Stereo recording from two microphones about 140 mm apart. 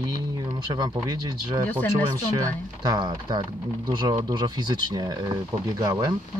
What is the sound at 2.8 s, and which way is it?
Speech, 30° right (ahead or behind).